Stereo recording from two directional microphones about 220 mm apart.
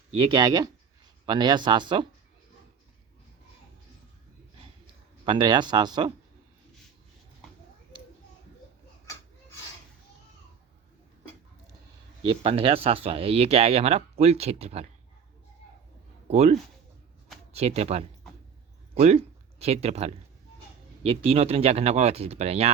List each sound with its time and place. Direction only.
0.3 s speech: 20° right (ahead or behind)
5.2 s speech: 20° right (ahead or behind)
12.2 s speech: 25° right (ahead or behind)
16.3 s speech: 30° right (ahead or behind)